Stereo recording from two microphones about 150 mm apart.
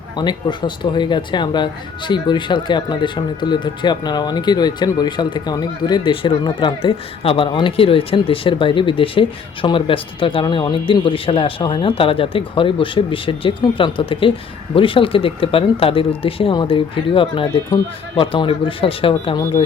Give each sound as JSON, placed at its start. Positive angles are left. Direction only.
{"t": 0.2, "sound": "speech", "side_deg": 30}